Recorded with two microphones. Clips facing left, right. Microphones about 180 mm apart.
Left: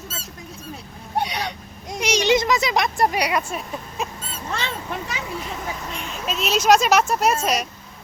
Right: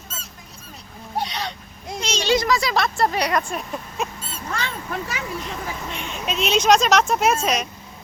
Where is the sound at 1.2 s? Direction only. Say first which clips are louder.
Left 2 dB; 10° left (ahead or behind).